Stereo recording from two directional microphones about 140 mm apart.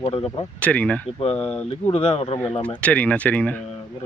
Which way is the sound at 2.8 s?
10° left (ahead or behind).